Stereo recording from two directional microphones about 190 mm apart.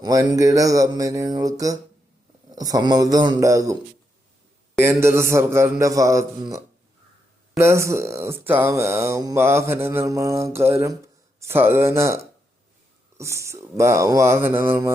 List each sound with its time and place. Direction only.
0.0 s a man's voice: 20° right (ahead or behind)
4.8 s speech: 15° right (ahead or behind)